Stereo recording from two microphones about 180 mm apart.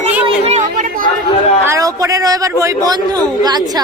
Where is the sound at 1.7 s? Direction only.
20° right (ahead or behind).